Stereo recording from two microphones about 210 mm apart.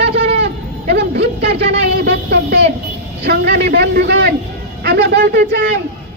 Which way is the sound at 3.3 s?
50° right (ahead or behind).